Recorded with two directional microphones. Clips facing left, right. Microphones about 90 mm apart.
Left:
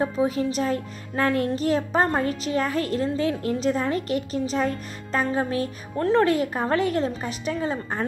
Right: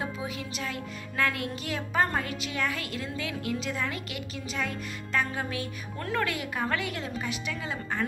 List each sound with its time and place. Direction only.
0.0 s speech: 40° left (ahead or behind)